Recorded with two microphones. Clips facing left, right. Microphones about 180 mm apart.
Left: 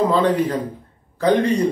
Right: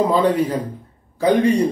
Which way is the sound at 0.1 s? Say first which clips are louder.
Right 1 dB; 10° right (ahead or behind).